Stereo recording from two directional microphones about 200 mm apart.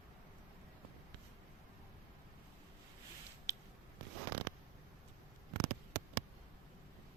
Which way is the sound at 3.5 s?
15° left (ahead or behind).